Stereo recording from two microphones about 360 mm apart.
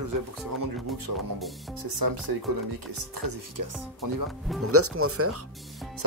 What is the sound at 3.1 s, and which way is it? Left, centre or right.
Speech, right.